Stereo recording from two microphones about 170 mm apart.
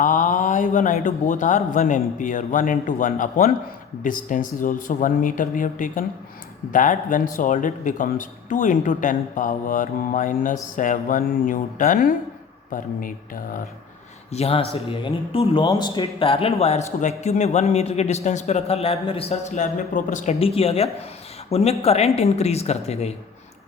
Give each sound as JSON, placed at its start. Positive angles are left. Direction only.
{"t": 0.0, "sound": "speech", "side_deg": 50}
{"t": 14.3, "sound": "a man's voice", "side_deg": 40}
{"t": 20.4, "sound": "a man's voice", "side_deg": 35}